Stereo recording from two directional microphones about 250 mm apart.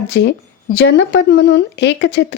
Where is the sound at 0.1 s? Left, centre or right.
Left.